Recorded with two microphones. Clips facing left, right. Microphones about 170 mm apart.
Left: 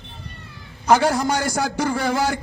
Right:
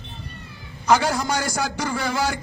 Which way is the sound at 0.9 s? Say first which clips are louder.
Left 3 dB; 50° left (ahead or behind).